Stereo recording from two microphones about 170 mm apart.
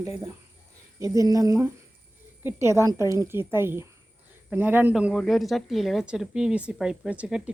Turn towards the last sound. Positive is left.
turn(degrees=-5)  # may be behind; listen again after turning